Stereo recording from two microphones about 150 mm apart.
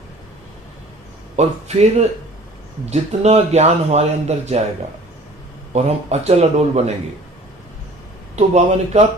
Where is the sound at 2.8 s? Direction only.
45° right (ahead or behind).